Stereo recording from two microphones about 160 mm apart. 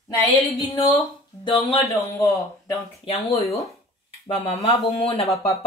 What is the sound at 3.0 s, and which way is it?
Speech, 40° left (ahead or behind).